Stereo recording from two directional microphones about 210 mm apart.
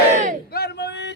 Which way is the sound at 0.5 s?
50° left (ahead or behind).